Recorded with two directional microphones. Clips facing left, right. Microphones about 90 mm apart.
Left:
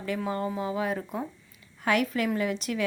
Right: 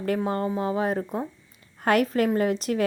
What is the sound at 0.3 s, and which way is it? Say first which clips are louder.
A woman's voice: right 4 dB; 40° right (ahead or behind).